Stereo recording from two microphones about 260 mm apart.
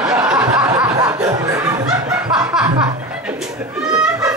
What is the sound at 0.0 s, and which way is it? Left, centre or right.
Snicker, centre.